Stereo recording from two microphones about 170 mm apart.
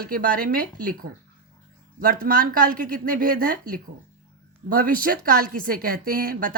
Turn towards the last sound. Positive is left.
turn(degrees=-55)  # may be behind; listen again after turning